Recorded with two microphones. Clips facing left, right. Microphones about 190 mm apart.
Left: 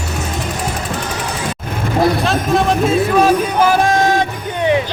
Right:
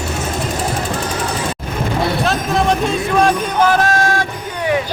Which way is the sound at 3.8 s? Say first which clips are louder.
Left 3 dB; 20° left (ahead or behind).